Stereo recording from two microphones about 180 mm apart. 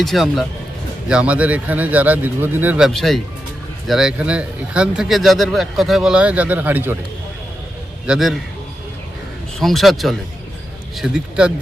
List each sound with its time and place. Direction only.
0.0 s speech: centre (ahead or behind)
8.0 s speech: 5° right (ahead or behind)
9.6 s speech: centre (ahead or behind)